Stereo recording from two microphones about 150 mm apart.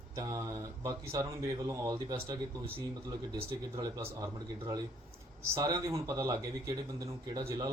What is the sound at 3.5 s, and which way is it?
Speech, 25° right (ahead or behind).